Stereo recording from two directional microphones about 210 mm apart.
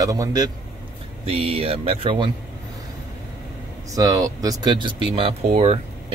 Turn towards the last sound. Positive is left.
turn(degrees=-30)  # may be behind; listen again after turning